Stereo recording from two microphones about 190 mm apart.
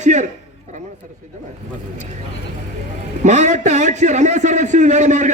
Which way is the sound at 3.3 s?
40° right (ahead or behind).